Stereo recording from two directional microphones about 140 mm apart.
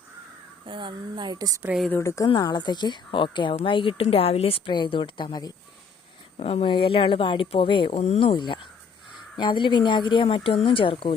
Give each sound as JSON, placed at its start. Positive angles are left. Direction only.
{"t": 0.6, "sound": "speech", "side_deg": -35}
{"t": 1.6, "sound": "a woman's voice", "side_deg": -5}
{"t": 1.9, "sound": "speech", "side_deg": 20}
{"t": 6.3, "sound": "speech", "side_deg": 45}
{"t": 8.0, "sound": "speech", "side_deg": 45}